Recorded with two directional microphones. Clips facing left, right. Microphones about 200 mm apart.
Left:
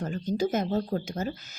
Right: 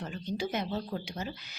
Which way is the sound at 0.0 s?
45° left (ahead or behind).